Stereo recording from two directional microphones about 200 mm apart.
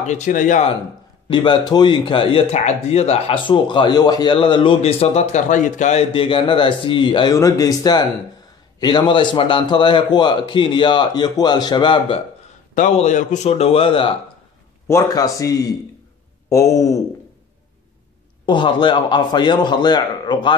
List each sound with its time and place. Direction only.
0.0 s speech: 35° left (ahead or behind)
1.3 s speech: 25° left (ahead or behind)
12.7 s speech: 35° left (ahead or behind)
14.9 s speech: 15° left (ahead or behind)
18.4 s speech: 25° left (ahead or behind)